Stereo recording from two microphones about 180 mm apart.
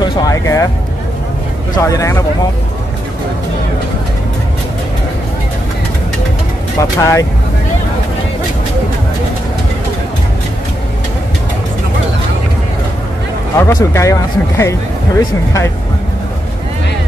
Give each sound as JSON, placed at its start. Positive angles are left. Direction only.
{"t": 0.0, "sound": "speech", "side_deg": 20}
{"t": 1.8, "sound": "speech", "side_deg": 15}
{"t": 6.8, "sound": "speech", "side_deg": 20}
{"t": 13.6, "sound": "speech", "side_deg": 15}